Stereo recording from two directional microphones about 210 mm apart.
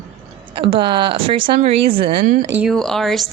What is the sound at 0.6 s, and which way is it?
Speech, 25° right (ahead or behind).